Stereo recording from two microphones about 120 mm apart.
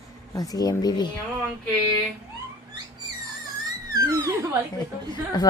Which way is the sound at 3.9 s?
25° right (ahead or behind).